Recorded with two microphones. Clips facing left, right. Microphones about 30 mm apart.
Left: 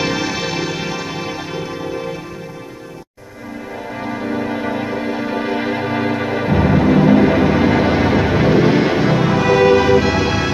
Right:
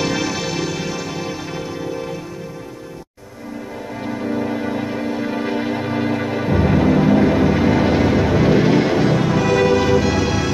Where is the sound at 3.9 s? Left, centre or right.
Centre.